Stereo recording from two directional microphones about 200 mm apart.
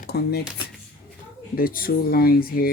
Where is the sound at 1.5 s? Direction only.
45° left (ahead or behind).